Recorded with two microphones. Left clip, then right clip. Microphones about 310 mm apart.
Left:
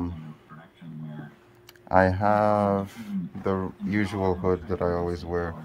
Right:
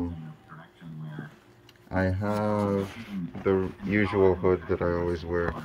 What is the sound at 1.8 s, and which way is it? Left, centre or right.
Speech, centre.